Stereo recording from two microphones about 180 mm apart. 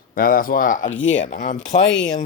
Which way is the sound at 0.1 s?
50° left (ahead or behind).